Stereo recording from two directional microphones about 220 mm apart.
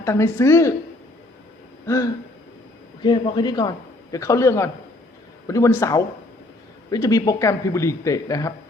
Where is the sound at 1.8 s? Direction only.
15° left (ahead or behind).